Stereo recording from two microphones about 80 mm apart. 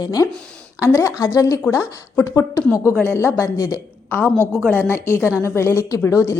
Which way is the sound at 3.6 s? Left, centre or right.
Left.